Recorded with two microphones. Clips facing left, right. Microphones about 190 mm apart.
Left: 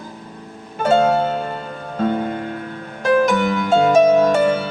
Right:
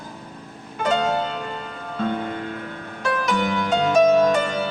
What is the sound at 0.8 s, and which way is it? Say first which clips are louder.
Music: left 6 dB; 45° left (ahead or behind).